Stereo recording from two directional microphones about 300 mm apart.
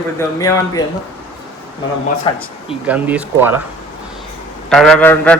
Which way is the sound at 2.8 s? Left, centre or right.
Centre.